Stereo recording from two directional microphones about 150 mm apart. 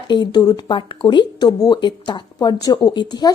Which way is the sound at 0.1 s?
30° left (ahead or behind).